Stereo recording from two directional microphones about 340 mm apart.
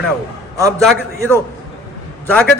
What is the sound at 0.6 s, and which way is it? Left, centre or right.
A man's voice, centre.